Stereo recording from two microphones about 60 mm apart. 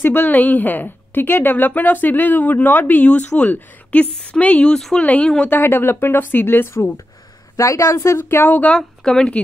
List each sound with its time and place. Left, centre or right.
0.0 s a woman's voice: left
4.7 s speech: centre
5.0 s a woman's voice: left
5.5 s a woman's voice: left
7.5 s speech: left
8.6 s speech: centre